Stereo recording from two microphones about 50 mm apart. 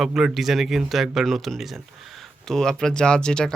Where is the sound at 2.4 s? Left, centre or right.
Centre.